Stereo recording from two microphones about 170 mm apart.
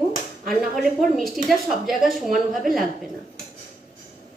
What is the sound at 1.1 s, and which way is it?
A woman's voice, centre (ahead or behind).